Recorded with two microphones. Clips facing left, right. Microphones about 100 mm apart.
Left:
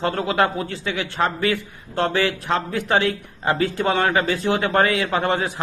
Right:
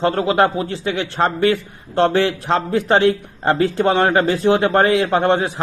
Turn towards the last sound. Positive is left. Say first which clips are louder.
# right 5 dB
turn(degrees=-20)  # may be behind; listen again after turning